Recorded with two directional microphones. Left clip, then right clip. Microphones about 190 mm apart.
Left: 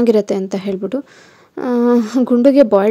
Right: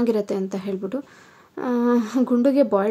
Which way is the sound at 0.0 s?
35° left (ahead or behind).